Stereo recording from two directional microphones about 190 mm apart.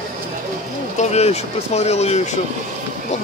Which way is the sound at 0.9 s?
35° left (ahead or behind).